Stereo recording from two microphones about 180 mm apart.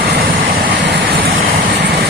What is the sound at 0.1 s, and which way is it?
Vehicle, 55° right (ahead or behind).